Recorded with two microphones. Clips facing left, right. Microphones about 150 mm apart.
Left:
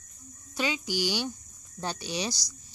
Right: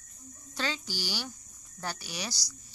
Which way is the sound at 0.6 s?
15° left (ahead or behind).